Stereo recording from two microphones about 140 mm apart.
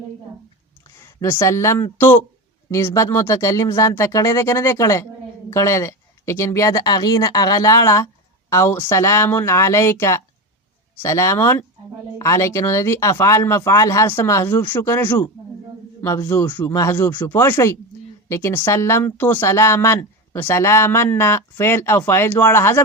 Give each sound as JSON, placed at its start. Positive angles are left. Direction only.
{"t": 0.9, "sound": "speech", "side_deg": 20}